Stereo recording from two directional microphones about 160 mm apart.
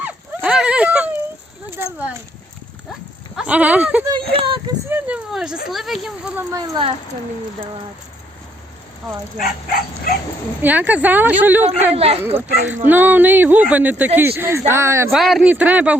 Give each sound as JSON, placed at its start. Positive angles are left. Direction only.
{"t": 0.0, "sound": "a sound", "side_deg": -5}
{"t": 3.3, "sound": "speech", "side_deg": -10}
{"t": 4.1, "sound": "a sound", "side_deg": -35}
{"t": 4.9, "sound": "a sound", "side_deg": -10}
{"t": 5.6, "sound": "speech", "side_deg": 0}
{"t": 6.5, "sound": "speech", "side_deg": -25}
{"t": 9.4, "sound": "bow-wow", "side_deg": 65}
{"t": 10.6, "sound": "speech", "side_deg": -10}
{"t": 11.9, "sound": "speech", "side_deg": -40}
{"t": 12.8, "sound": "speech", "side_deg": -10}
{"t": 15.1, "sound": "speech", "side_deg": 0}